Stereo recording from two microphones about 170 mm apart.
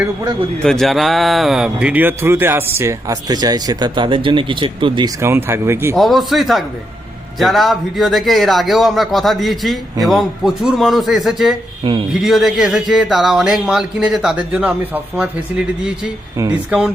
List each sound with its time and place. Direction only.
0.6 s speech: centre (ahead or behind); by 5.1 s 30° right (ahead or behind)
5.2 s speech: 15° right (ahead or behind)
6.0 s speech: centre (ahead or behind)
11.8 s speech: 30° right (ahead or behind)
12.2 s speech: centre (ahead or behind)